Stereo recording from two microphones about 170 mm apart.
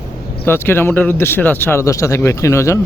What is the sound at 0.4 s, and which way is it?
Speech, 15° left (ahead or behind).